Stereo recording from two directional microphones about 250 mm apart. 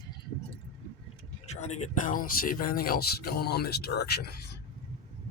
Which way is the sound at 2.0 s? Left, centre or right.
Left.